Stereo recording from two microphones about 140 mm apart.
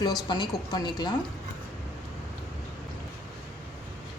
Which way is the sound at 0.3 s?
35° left (ahead or behind).